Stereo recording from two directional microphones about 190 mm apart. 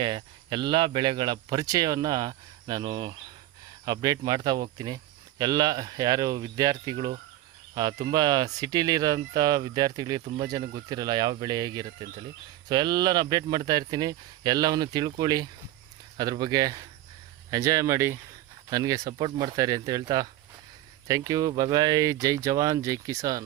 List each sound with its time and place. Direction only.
0.0 s speech: 25° right (ahead or behind)